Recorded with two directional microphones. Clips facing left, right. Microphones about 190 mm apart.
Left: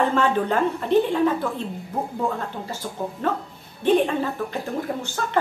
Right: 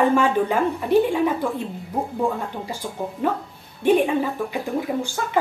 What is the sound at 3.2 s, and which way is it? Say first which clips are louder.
Speech: right 3 dB; 10° right (ahead or behind).